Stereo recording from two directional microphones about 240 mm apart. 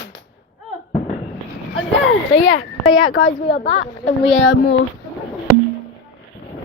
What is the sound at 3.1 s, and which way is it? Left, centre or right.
A woman's voice, left.